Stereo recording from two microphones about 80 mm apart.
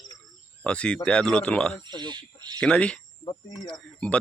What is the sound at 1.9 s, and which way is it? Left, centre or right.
Speech, right.